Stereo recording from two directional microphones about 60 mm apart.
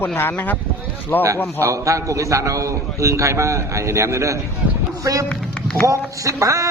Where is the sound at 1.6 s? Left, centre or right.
Right.